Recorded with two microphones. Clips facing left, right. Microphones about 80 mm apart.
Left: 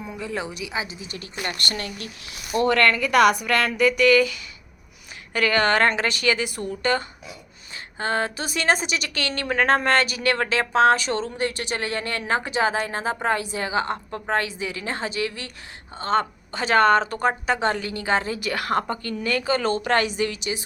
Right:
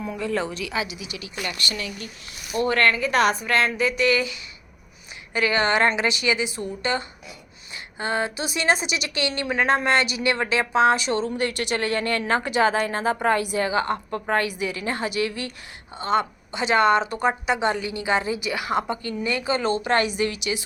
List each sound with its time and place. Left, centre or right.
0.0 s a woman's voice: centre
0.5 s a woman's voice: centre; by 2.0 s left
2.6 s speech: left
3.1 s a woman's voice: left
5.3 s speech: left
7.9 s a woman's voice: left
19.0 s a woman's voice: centre
20.0 s a woman's voice: right
20.3 s a woman's voice: left